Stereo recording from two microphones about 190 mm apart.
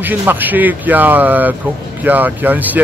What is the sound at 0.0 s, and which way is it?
Speech, 10° right (ahead or behind).